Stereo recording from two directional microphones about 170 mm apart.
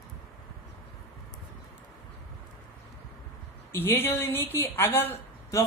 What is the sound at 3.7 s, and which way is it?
Speech, 15° left (ahead or behind).